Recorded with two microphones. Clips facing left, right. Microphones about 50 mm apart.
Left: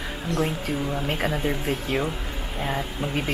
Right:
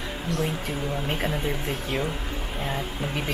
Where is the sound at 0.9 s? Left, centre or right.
Centre.